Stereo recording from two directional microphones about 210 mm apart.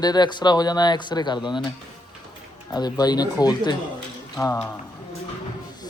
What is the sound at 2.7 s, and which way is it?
A man's voice, 20° left (ahead or behind).